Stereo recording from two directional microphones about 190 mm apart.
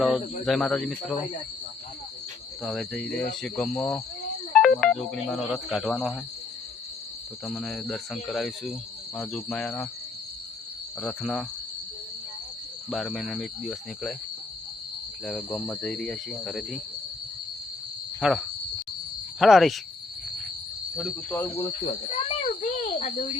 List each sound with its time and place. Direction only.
0.0 s speech: centre (ahead or behind)
2.6 s speech: centre (ahead or behind)
7.4 s speech: centre (ahead or behind)
11.0 s speech: centre (ahead or behind)
12.9 s speech: centre (ahead or behind)
15.2 s speech: 5° left (ahead or behind)
18.2 s speech: centre (ahead or behind)
21.0 s cricket: 10° left (ahead or behind)
21.5 s speech: 30° left (ahead or behind)